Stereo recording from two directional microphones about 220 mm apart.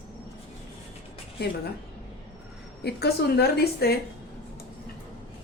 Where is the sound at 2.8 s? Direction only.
45° left (ahead or behind).